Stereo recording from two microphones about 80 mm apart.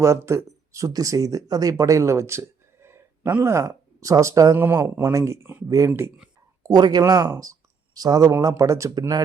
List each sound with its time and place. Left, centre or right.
0.0 s speech: right
2.8 s a sound: right
3.4 s speech: right
4.5 s speech: right
5.6 s speech: right
6.6 s speech: right
9.0 s speech: right